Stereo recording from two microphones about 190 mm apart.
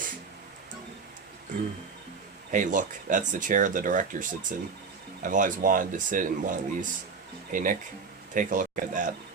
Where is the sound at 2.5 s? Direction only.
40° right (ahead or behind).